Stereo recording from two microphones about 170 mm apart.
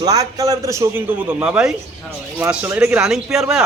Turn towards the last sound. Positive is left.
turn(degrees=-5)  # may be behind; listen again after turning